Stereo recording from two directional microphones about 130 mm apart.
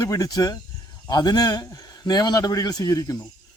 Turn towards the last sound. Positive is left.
turn(degrees=25)  # may be behind; listen again after turning